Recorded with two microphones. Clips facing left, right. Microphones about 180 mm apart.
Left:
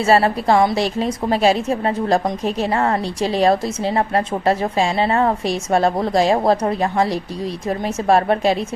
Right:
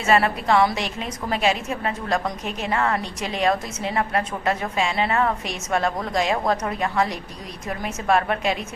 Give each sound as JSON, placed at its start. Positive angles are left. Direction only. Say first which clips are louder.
{"t": 0.0, "sound": "a woman's voice", "louder": "left 5 dB", "side_deg": 30}